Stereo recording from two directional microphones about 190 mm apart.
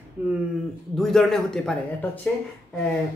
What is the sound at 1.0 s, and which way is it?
Speech, centre (ahead or behind).